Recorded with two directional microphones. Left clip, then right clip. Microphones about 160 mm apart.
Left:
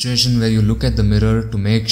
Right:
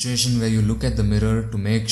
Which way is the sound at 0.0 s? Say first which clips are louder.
Left 5 dB; 20° left (ahead or behind).